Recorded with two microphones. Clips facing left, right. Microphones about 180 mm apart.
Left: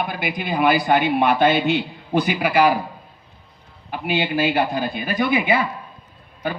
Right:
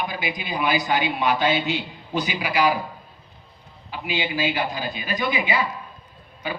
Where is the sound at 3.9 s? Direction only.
55° left (ahead or behind).